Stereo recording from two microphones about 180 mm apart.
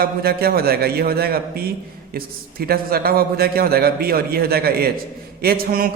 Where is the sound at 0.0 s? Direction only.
55° right (ahead or behind).